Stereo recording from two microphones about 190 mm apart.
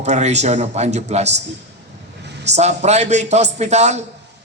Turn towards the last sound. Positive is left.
turn(degrees=-35)  # may be behind; listen again after turning